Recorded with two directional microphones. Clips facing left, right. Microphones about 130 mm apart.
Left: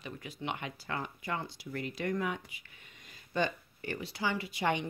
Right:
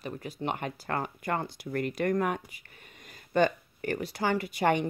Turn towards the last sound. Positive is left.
turn(degrees=-50)  # may be behind; listen again after turning